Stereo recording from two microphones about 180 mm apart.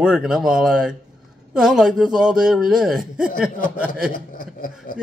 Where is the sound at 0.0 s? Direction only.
5° right (ahead or behind).